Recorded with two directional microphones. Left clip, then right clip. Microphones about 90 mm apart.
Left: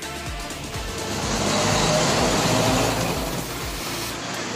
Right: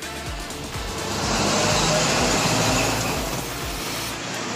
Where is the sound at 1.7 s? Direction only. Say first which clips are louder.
Even; 30° left (ahead or behind).